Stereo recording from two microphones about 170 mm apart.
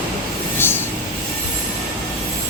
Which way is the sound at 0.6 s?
15° left (ahead or behind).